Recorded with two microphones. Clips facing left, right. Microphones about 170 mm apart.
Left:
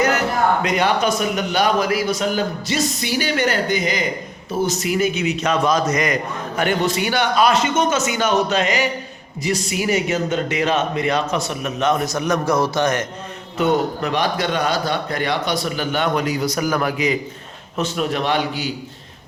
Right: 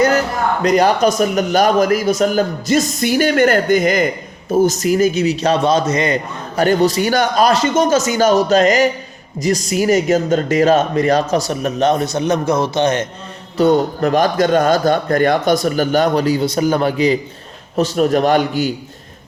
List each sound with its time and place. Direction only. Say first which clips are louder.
0.6 s speech: right 6 dB; 40° right (ahead or behind)
6.6 s speech: right 6 dB; 40° right (ahead or behind)
13.6 s speech: right 5 dB; 40° right (ahead or behind)